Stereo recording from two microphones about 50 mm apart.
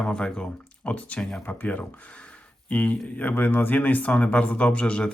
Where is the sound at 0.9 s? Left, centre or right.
Left.